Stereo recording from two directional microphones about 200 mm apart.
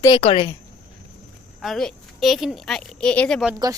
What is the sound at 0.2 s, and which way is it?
Speech, 30° left (ahead or behind).